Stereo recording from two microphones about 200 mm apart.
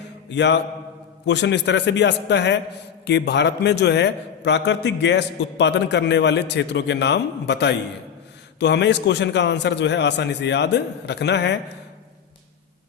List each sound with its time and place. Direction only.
0.3 s a man's voice: 60° left (ahead or behind)